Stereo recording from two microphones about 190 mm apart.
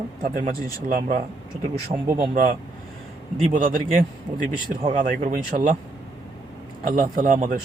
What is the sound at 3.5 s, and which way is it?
Speech, 45° right (ahead or behind).